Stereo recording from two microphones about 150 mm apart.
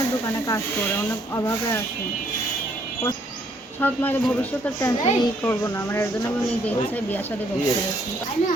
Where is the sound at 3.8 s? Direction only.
10° left (ahead or behind).